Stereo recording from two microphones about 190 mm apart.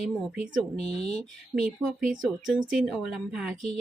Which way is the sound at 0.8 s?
30° left (ahead or behind).